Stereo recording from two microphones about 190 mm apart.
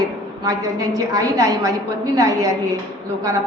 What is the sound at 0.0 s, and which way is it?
A woman's voice, 20° right (ahead or behind).